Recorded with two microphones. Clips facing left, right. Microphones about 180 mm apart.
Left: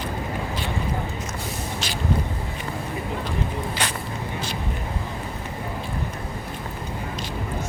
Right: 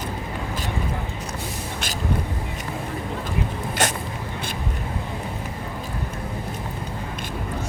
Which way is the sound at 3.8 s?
45° right (ahead or behind).